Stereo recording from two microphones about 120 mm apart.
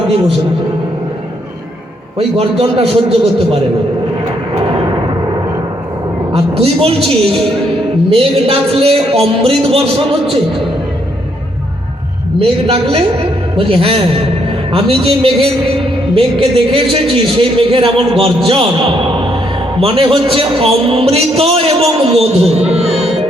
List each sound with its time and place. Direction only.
2.1 s a man's voice: 55° right (ahead or behind)
4.5 s a sound: 45° right (ahead or behind)
6.3 s a man's voice: 50° right (ahead or behind)
8.1 s a man's voice: 50° right (ahead or behind)
12.4 s a man's voice: 55° right (ahead or behind)